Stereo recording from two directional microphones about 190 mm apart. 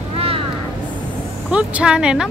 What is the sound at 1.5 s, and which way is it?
Speech, 5° right (ahead or behind).